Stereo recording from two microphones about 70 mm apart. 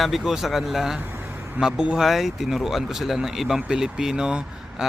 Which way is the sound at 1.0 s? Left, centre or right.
Right.